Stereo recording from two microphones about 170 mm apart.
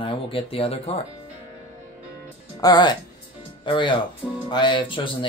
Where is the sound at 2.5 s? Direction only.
25° left (ahead or behind).